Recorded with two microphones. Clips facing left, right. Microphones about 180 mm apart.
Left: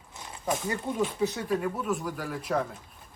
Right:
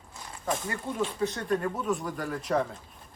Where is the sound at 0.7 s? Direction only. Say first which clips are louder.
Left 2 dB; 20° left (ahead or behind).